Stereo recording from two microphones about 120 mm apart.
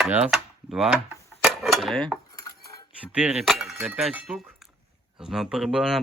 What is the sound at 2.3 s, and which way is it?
Cutlery, 30° left (ahead or behind).